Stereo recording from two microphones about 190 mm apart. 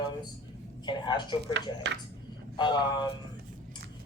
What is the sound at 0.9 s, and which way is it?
Speech, 25° left (ahead or behind).